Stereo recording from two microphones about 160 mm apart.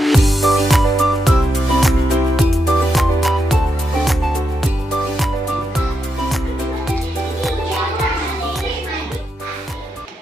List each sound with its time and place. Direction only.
0.0 s music: centre (ahead or behind)